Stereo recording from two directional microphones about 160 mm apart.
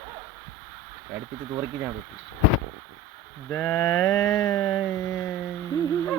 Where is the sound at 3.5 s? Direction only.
15° left (ahead or behind).